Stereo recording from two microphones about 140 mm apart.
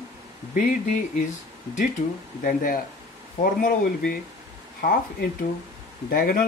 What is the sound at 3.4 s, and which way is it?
Speech, 90° left.